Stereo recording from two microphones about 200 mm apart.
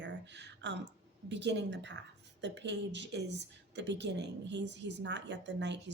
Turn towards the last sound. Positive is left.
turn(degrees=-60)  # may be behind; listen again after turning